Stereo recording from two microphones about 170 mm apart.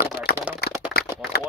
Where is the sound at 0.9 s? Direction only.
65° left (ahead or behind).